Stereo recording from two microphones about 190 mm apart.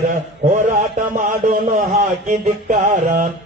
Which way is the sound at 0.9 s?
45° right (ahead or behind).